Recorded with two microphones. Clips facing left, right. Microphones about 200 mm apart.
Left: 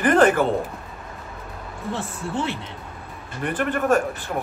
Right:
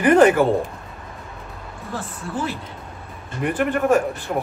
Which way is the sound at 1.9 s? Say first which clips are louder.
Even; 25° left (ahead or behind).